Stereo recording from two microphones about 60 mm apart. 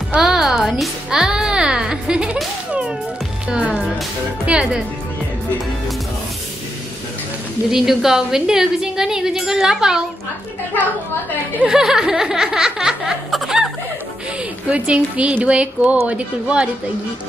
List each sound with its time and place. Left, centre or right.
0.2 s music: centre
3.4 s music: centre
7.7 s a woman's voice: centre
11.6 s laughter: centre
14.7 s a woman's voice: centre